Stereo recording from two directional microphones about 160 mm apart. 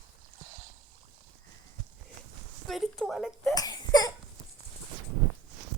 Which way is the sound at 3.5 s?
25° left (ahead or behind).